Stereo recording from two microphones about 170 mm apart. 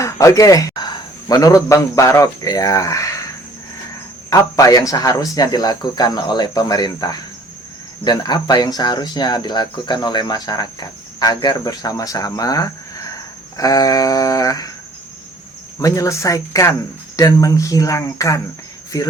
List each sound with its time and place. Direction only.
0.0 s speech: 20° left (ahead or behind)
4.3 s speech: 20° left (ahead or behind)
15.8 s speech: 20° left (ahead or behind)